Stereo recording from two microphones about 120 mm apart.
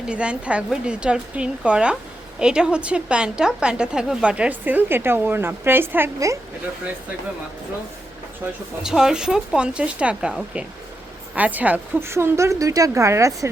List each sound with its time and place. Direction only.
0.1 s a woman's voice: 10° right (ahead or behind)
8.8 s a woman's voice: 5° right (ahead or behind); by 13.5 s 25° right (ahead or behind)